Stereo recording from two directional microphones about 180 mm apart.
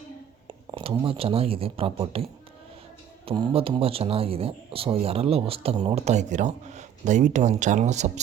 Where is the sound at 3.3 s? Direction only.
30° right (ahead or behind).